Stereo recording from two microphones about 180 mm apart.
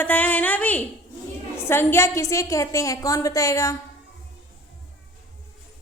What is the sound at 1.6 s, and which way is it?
A woman's voice, 15° left (ahead or behind).